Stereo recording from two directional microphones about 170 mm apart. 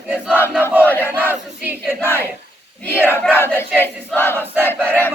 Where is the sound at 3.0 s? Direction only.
10° left (ahead or behind).